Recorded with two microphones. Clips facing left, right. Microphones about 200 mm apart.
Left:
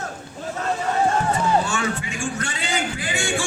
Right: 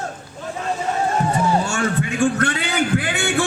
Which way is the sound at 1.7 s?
50° right (ahead or behind).